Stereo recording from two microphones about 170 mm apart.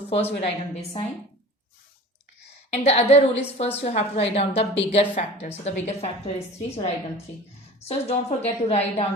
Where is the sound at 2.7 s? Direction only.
40° left (ahead or behind).